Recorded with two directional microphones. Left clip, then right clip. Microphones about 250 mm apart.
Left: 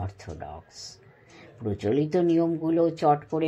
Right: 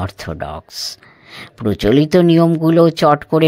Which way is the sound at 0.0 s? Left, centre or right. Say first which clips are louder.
Right 13 dB; right.